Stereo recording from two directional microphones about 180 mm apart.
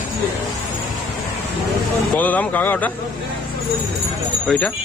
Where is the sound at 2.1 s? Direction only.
10° left (ahead or behind).